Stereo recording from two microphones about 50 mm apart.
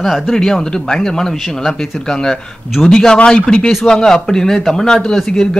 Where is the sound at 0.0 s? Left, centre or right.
Centre.